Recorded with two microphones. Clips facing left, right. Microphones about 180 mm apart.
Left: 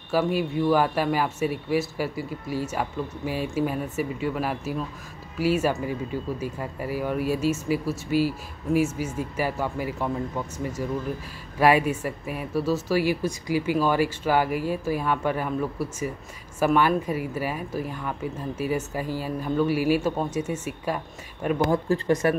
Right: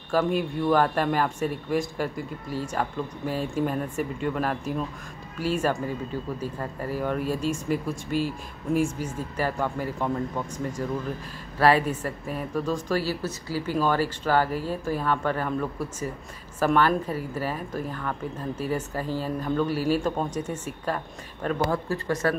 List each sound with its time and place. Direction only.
0.1 s speech: 5° left (ahead or behind)